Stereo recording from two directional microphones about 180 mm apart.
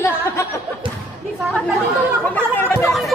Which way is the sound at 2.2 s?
10° left (ahead or behind).